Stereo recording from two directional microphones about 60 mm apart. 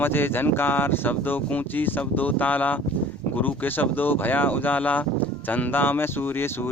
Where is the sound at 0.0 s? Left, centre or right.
Left.